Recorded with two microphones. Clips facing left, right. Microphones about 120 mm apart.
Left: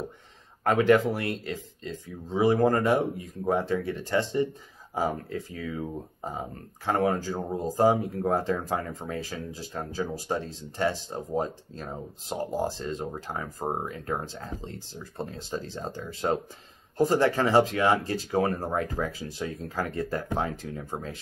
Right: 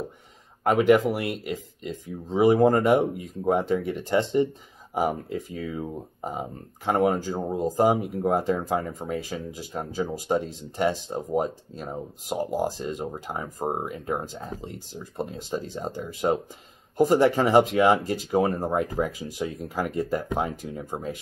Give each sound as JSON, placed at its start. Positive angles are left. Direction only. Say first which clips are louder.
{"t": 0.7, "sound": "speech", "louder": "right 2 dB", "side_deg": -15}